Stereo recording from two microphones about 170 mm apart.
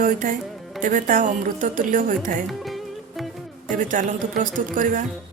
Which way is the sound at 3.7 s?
50° right (ahead or behind).